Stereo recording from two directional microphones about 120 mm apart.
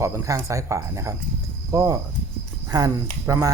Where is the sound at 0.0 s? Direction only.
25° right (ahead or behind).